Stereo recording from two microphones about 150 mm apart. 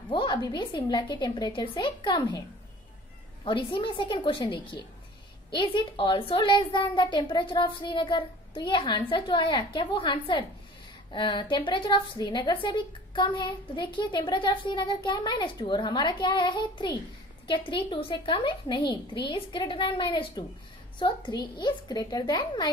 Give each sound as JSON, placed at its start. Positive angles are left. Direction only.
{"t": 0.1, "sound": "a woman's voice", "side_deg": 30}
{"t": 3.4, "sound": "a woman's voice", "side_deg": 35}